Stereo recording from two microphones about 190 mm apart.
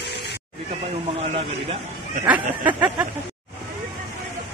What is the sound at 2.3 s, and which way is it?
Speech, 10° right (ahead or behind).